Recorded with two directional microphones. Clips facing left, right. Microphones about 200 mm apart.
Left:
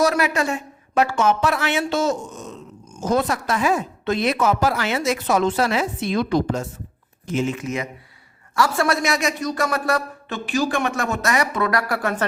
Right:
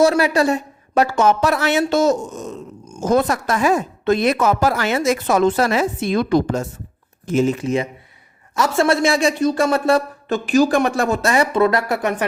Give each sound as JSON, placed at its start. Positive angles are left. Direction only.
{"t": 0.0, "sound": "a woman's voice", "side_deg": -30}
{"t": 10.2, "sound": "speech", "side_deg": -40}